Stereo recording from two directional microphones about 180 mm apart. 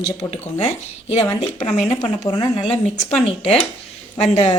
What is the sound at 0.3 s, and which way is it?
A woman's voice, 30° left (ahead or behind).